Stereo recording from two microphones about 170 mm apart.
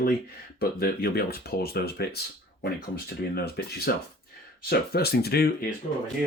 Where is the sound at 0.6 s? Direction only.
65° left (ahead or behind).